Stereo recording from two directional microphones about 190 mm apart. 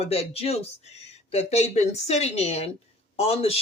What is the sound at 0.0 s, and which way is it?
Speech, 30° left (ahead or behind).